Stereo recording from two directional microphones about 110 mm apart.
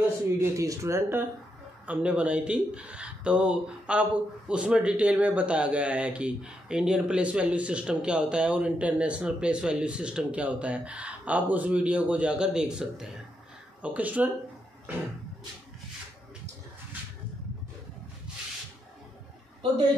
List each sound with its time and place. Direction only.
0.4 s speech: 30° right (ahead or behind)
1.9 s speech: 10° right (ahead or behind)